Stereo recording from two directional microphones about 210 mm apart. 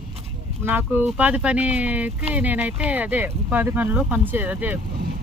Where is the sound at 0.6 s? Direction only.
10° right (ahead or behind).